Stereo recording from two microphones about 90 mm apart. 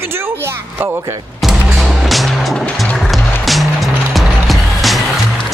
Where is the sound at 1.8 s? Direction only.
5° right (ahead or behind).